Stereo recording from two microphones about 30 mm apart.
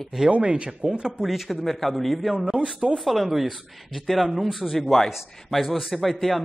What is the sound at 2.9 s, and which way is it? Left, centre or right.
A woman's voice, centre.